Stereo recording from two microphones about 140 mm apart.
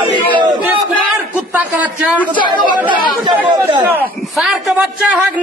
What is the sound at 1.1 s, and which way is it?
Speech, 10° right (ahead or behind).